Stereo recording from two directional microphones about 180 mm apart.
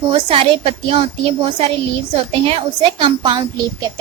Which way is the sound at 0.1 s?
30° right (ahead or behind).